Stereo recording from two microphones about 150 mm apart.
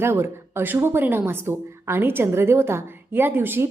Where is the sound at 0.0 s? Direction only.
15° right (ahead or behind).